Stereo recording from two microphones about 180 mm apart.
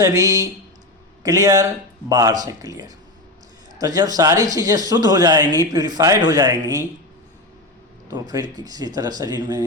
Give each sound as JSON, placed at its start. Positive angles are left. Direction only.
{"t": 0.0, "sound": "speech", "side_deg": -20}
{"t": 8.0, "sound": "speech", "side_deg": -20}